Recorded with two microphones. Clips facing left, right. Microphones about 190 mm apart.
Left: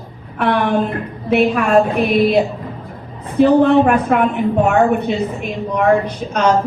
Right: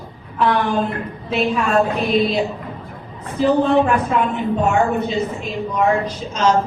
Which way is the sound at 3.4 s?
65° left (ahead or behind).